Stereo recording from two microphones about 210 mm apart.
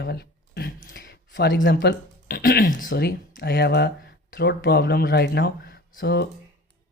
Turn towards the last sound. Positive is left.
turn(degrees=50)  # may be behind; listen again after turning